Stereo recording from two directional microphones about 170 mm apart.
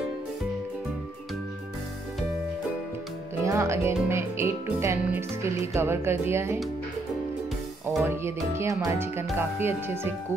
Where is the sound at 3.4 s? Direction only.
15° right (ahead or behind).